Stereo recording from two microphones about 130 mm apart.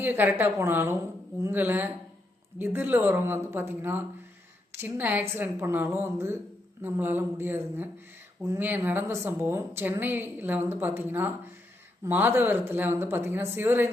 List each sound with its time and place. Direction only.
0.0 s speech: 15° right (ahead or behind)